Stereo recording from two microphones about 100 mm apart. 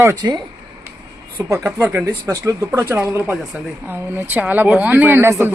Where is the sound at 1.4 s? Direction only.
35° right (ahead or behind).